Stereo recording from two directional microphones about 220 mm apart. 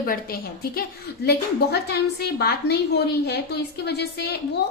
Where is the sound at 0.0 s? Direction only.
40° left (ahead or behind).